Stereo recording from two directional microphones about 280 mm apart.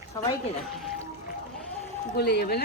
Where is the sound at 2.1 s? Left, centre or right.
Left.